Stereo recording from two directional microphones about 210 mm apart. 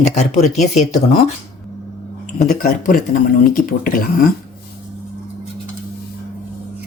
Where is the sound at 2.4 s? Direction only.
40° left (ahead or behind).